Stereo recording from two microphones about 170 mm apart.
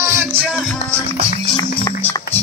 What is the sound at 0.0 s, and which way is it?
Music, 15° right (ahead or behind).